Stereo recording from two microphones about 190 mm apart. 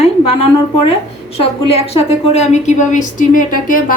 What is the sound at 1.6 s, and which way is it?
A woman's voice, 30° left (ahead or behind).